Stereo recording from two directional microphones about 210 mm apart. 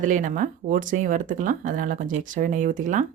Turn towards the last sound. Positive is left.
turn(degrees=-40)  # may be behind; listen again after turning